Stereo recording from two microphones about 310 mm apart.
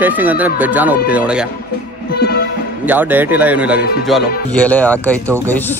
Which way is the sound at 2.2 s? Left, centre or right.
Left.